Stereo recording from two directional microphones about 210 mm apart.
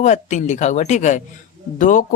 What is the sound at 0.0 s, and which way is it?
Speech, 35° left (ahead or behind).